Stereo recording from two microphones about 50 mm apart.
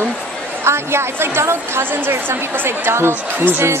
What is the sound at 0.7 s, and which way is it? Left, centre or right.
A woman's voice, right.